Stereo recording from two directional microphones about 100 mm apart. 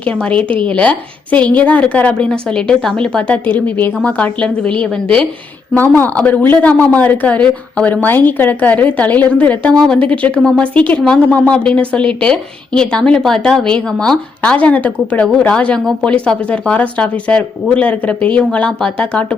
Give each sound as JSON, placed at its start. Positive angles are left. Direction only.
{"t": 0.0, "sound": "a woman's voice", "side_deg": 10}